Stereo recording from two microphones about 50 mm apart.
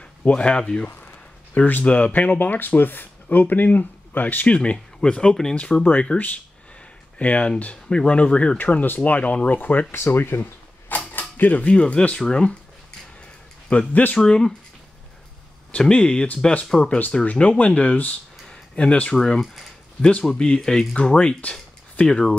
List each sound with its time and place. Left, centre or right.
0.2 s speech: left
1.5 s speech: left
9.9 s speech: left
11.0 s a sound: left
11.7 s speech: left
13.7 s speech: left
15.8 s speech: centre
17.1 s speech: left
18.5 s a sound: centre
19.1 s speech: centre
19.4 s speech: centre
20.3 s speech: centre